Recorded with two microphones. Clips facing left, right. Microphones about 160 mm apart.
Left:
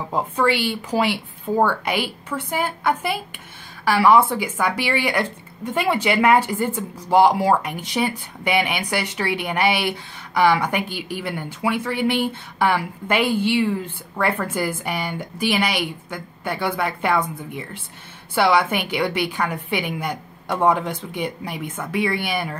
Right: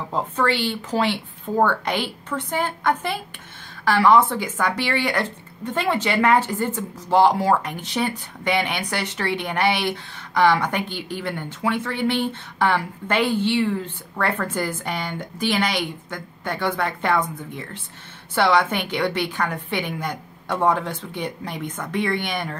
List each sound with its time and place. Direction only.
0.1 s speech: 10° left (ahead or behind)